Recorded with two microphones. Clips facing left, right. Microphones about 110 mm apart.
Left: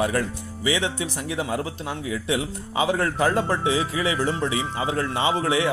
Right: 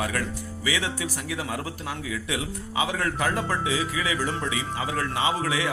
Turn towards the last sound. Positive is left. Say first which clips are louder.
# left 4 dB
turn(degrees=30)  # may be behind; listen again after turning